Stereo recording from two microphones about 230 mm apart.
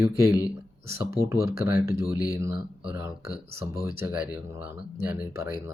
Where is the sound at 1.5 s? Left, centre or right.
Left.